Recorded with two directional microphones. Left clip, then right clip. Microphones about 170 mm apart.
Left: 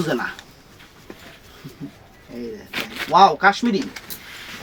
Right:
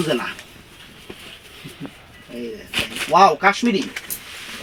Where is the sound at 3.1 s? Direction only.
5° right (ahead or behind).